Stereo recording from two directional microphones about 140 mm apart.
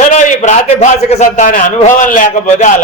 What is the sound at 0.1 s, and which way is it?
A man's voice, 60° left (ahead or behind).